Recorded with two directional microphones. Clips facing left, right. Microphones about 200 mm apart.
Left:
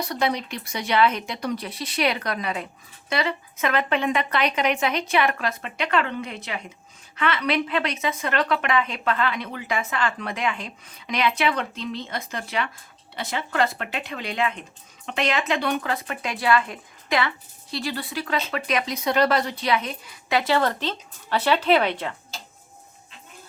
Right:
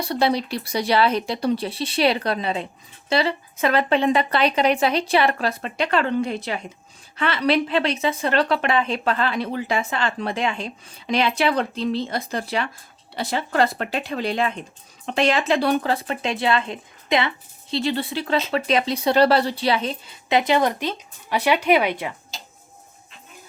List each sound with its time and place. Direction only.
0.0 s speech: 30° right (ahead or behind); by 22.1 s 10° right (ahead or behind)